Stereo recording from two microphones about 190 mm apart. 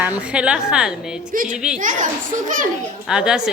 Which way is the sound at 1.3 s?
45° right (ahead or behind).